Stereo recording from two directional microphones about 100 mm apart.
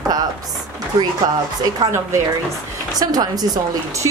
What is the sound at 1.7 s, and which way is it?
Speech, 40° right (ahead or behind).